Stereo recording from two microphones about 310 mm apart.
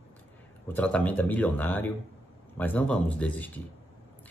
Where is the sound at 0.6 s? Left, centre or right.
Centre.